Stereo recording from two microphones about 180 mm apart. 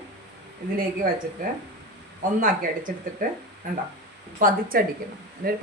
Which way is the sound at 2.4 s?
50° right (ahead or behind).